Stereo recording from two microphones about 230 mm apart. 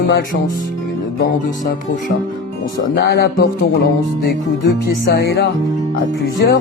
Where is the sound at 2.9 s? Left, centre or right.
Left.